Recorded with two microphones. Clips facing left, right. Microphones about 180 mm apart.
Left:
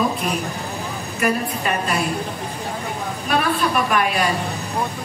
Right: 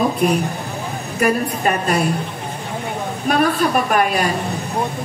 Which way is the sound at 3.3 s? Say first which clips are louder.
Right 4 dB; 45° right (ahead or behind).